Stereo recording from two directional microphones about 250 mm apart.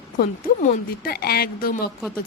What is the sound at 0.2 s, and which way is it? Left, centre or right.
A woman's voice, left.